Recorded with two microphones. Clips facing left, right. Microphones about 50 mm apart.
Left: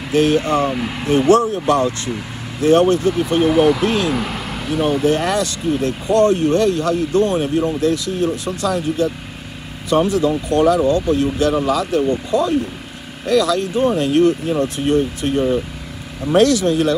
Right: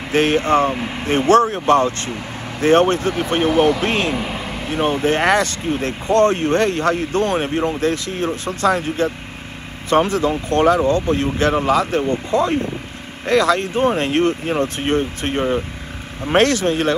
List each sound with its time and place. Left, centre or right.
0.1 s speech: right